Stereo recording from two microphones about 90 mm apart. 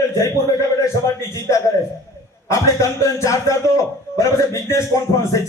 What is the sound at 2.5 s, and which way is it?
A man's voice, 35° left (ahead or behind).